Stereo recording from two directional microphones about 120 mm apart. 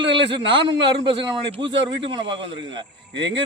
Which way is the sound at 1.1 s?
45° right (ahead or behind).